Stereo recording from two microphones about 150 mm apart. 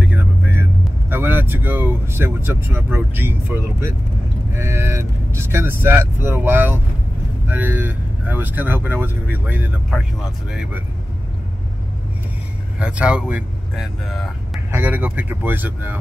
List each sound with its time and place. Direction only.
0.0 s vehicle: 10° right (ahead or behind)
1.1 s speech: 15° right (ahead or behind)
12.7 s speech: 10° right (ahead or behind)